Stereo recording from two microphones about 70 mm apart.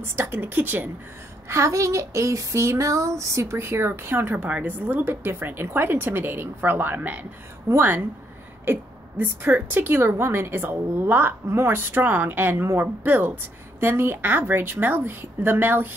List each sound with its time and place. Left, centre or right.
0.0 s a woman's voice: right
1.5 s a sound: right
4.5 s a woman's voice: right